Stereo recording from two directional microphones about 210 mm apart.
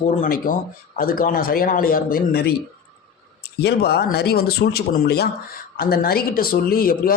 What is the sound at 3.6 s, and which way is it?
Speech, 50° left (ahead or behind).